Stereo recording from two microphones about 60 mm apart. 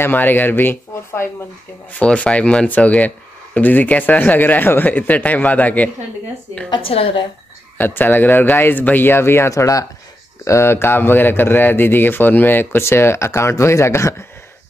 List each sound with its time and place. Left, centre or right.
0.0 s speech: left
2.0 s speech: left
7.7 s speech: left
10.4 s speech: left